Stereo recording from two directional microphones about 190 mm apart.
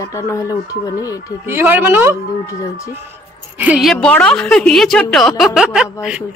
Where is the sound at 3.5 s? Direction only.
5° right (ahead or behind).